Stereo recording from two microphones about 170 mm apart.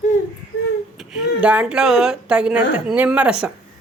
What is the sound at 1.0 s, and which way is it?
A woman's voice, 5° right (ahead or behind).